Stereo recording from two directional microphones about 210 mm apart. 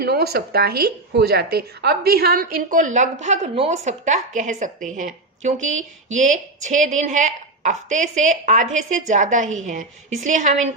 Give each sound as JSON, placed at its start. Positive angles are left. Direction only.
{"t": 0.0, "sound": "a woman's voice", "side_deg": -50}